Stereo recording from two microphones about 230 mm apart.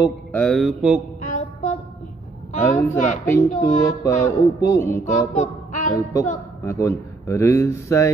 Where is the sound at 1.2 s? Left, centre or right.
Left.